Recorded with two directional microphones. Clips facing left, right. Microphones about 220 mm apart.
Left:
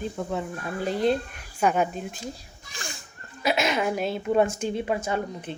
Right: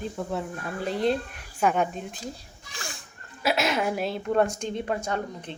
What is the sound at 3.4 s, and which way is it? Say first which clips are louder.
Speech: left 1 dB; centre (ahead or behind).